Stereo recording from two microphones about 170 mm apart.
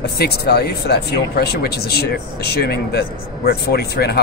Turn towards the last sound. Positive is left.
turn(degrees=70)  # may be behind; listen again after turning